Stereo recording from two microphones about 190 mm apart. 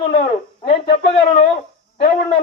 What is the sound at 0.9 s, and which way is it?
Speech, 40° left (ahead or behind).